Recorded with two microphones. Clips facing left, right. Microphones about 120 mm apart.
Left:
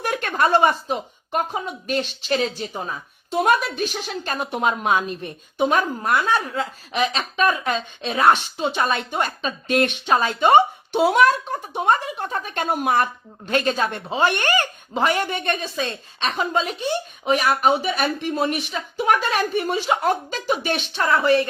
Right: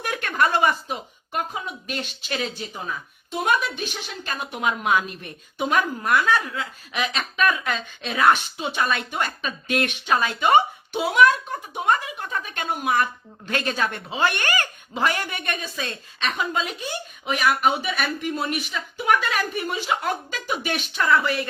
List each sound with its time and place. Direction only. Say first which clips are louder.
0.0 s speech: left 2 dB; 35° left (ahead or behind)
4.9 s a woman's voice: left 2 dB; 25° left (ahead or behind)
13.4 s a woman's voice: left 4 dB; 25° left (ahead or behind)